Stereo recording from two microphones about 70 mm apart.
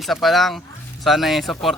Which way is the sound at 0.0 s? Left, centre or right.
Centre.